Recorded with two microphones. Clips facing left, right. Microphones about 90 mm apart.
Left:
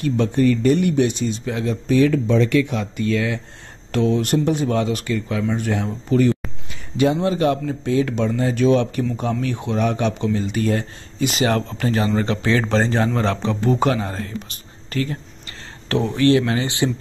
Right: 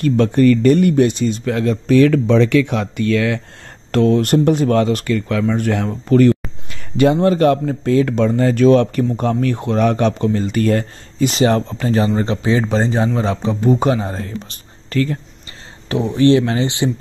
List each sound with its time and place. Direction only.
0.0 s speech: 60° right (ahead or behind); by 3.3 s 85° right
3.9 s speech: 55° right (ahead or behind)
11.3 s speech: 30° right (ahead or behind)
12.4 s a man's voice: 15° right (ahead or behind)
14.9 s speech: 40° right (ahead or behind)
15.9 s a man's voice: 20° right (ahead or behind)